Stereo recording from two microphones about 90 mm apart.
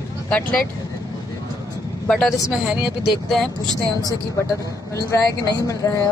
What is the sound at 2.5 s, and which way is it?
Speech, 10° right (ahead or behind).